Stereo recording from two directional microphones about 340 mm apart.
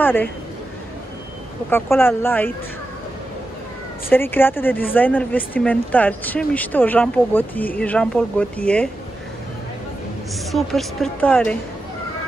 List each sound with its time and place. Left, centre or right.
0.0 s a woman's voice: centre
1.7 s speech: centre
4.1 s speech: centre
10.5 s speech: centre